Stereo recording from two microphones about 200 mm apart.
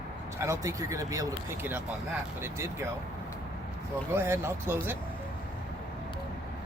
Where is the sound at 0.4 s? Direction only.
15° right (ahead or behind).